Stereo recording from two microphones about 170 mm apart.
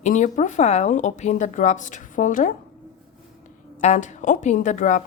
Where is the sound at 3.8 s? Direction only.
45° left (ahead or behind).